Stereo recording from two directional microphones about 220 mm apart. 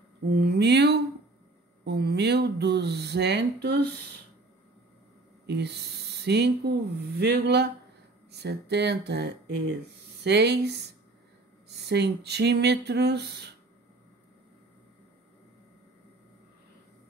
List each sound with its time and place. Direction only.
0.4 s speech: 50° right (ahead or behind)
5.5 s speech: 50° right (ahead or behind)
11.9 s speech: 50° right (ahead or behind)